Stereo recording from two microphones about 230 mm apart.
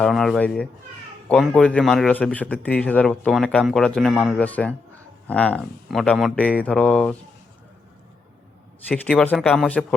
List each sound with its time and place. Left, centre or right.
0.0 s a man's voice: centre
8.9 s a man's voice: centre